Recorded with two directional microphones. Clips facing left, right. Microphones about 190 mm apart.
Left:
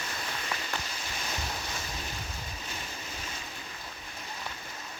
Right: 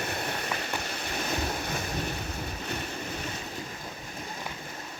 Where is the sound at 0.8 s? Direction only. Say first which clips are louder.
Right 6 dB; 60° right (ahead or behind).